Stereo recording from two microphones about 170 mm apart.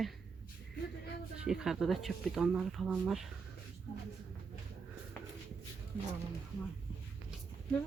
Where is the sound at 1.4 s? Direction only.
5° right (ahead or behind).